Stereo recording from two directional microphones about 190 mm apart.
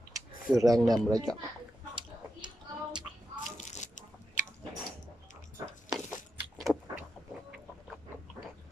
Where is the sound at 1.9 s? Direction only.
25° right (ahead or behind).